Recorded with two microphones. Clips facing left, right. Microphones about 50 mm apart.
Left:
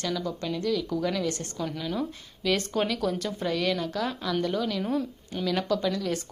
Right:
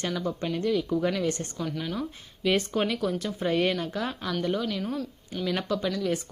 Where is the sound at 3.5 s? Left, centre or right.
Right; by 4.8 s centre.